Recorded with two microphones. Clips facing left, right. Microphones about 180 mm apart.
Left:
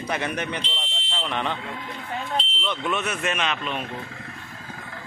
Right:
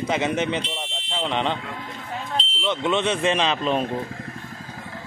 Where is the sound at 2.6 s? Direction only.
20° right (ahead or behind).